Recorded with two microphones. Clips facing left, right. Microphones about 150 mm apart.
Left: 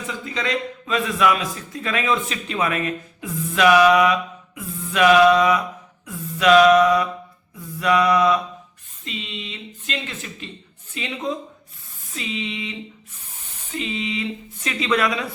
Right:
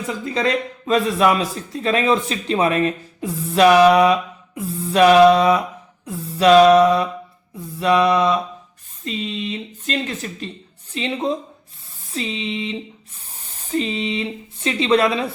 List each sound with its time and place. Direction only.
0.1 s a man's voice: 40° right (ahead or behind)
7.8 s mantra: 30° right (ahead or behind)
9.0 s a man's voice: 40° right (ahead or behind)